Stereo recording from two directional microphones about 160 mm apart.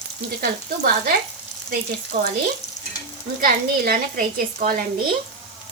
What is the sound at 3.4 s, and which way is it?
A woman's voice, 70° right (ahead or behind).